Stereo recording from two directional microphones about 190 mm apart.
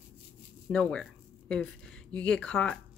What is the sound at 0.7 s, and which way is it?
Zipper, 5° left (ahead or behind).